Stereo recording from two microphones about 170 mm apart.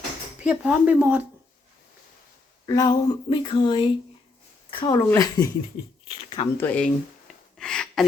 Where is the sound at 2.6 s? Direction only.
20° left (ahead or behind).